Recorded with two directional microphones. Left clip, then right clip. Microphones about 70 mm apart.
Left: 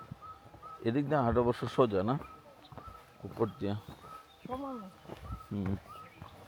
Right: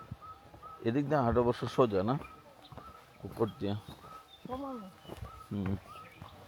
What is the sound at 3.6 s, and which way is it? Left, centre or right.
Speech, centre.